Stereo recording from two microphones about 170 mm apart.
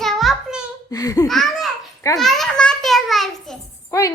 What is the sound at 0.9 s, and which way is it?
Speech, 20° left (ahead or behind).